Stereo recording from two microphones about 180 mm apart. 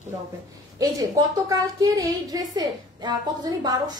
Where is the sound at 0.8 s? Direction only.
20° right (ahead or behind).